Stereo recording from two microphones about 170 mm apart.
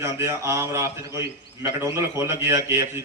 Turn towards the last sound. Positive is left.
turn(degrees=-15)  # may be behind; listen again after turning